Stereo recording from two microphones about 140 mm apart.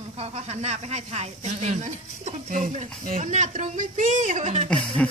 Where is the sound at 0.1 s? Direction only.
50° right (ahead or behind).